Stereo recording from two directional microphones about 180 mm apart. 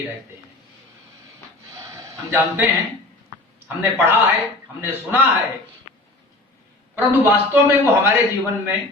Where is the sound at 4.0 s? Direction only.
10° right (ahead or behind).